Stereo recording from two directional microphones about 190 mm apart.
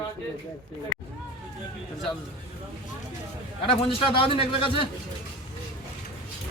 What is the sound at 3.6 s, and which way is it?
A man's voice, 30° left (ahead or behind).